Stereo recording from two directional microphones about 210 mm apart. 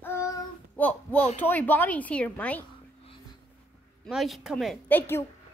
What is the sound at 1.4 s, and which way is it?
Speech, 10° left (ahead or behind).